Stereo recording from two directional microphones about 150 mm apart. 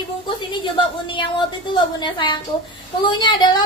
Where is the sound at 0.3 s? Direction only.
30° left (ahead or behind).